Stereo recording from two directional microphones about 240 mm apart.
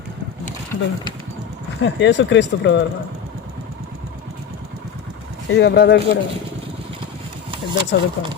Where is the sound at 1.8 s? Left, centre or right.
Left.